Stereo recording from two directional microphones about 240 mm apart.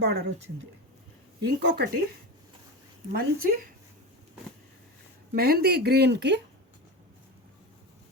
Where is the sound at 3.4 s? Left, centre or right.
Right.